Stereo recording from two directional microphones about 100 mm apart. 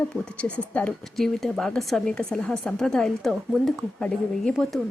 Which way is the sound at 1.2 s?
Centre (ahead or behind).